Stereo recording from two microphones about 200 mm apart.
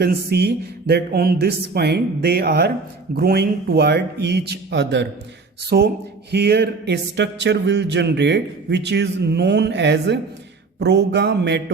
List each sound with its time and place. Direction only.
0.0 s speech: 50° right (ahead or behind)